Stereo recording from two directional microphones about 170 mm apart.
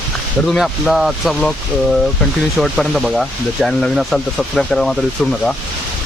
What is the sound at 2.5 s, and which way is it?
Speech, centre (ahead or behind).